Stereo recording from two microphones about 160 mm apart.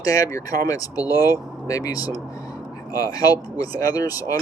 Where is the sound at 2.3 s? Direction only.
20° left (ahead or behind).